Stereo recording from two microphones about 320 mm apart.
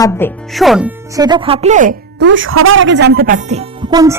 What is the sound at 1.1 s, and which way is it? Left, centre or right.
Speech, centre.